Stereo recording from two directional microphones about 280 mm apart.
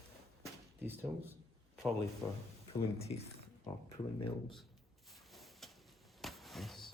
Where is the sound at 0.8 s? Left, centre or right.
Centre.